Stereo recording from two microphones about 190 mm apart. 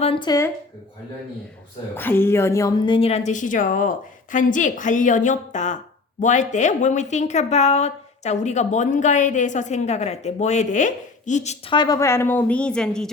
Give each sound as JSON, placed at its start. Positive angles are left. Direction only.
{"t": 0.0, "sound": "speech", "side_deg": 25}
{"t": 2.0, "sound": "a woman's voice", "side_deg": 10}
{"t": 11.7, "sound": "a woman's voice", "side_deg": 20}